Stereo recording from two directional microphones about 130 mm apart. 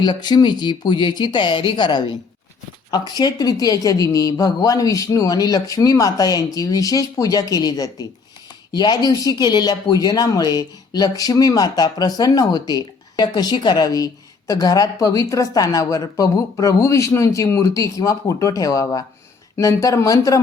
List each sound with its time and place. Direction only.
0.0 s speech: 35° left (ahead or behind)